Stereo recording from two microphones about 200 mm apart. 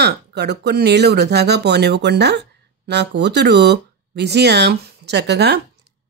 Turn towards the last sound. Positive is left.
turn(degrees=-55)  # may be behind; listen again after turning